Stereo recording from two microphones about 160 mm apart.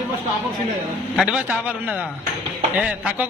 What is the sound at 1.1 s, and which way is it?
A man's voice, 5° right (ahead or behind).